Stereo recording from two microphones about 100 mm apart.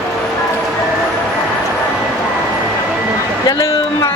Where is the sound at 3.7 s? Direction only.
30° left (ahead or behind).